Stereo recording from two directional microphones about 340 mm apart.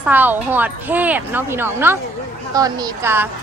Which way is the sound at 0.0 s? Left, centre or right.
Centre.